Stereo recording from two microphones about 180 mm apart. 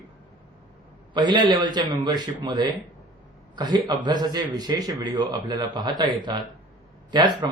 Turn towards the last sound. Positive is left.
turn(degrees=-25)  # may be behind; listen again after turning